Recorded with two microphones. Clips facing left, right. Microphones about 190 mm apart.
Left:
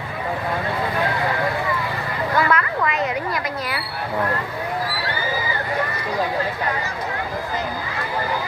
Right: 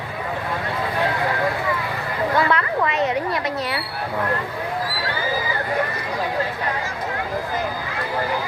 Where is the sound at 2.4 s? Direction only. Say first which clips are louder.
Left 2 dB; 30° right (ahead or behind).